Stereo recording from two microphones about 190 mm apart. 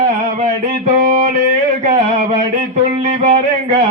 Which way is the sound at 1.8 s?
35° right (ahead or behind).